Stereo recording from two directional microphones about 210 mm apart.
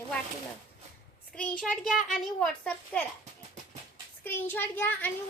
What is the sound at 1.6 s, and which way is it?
A child's voice, centre (ahead or behind).